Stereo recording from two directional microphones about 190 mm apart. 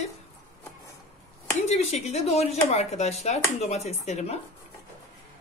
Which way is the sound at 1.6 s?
35° left (ahead or behind).